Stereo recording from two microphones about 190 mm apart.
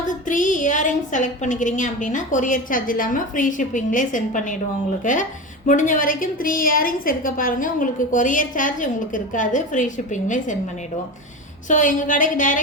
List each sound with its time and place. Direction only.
0.3 s a woman's voice: 45° left (ahead or behind)
11.7 s a woman's voice: 45° left (ahead or behind)